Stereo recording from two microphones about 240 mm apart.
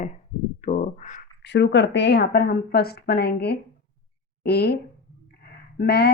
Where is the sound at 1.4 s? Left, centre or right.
Left.